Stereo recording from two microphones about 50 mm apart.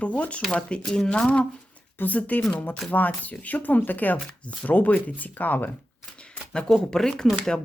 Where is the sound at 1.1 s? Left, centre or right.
Left.